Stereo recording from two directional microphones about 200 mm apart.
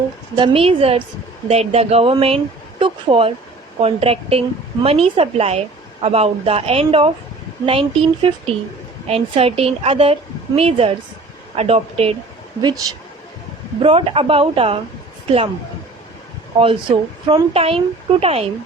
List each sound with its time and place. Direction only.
0.3 s a woman's voice: 25° right (ahead or behind)
12.6 s a woman's voice: 20° right (ahead or behind)
16.5 s a woman's voice: 30° right (ahead or behind)